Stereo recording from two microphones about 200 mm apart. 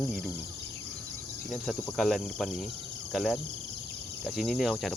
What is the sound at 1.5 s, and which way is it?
Speech, centre (ahead or behind).